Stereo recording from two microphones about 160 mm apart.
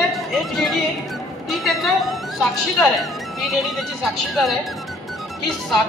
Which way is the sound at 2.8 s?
Centre (ahead or behind).